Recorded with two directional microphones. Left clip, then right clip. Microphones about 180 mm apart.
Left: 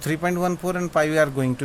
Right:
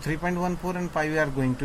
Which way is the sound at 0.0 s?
65° left (ahead or behind).